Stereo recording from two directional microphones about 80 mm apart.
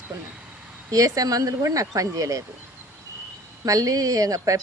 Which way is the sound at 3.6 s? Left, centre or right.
Right.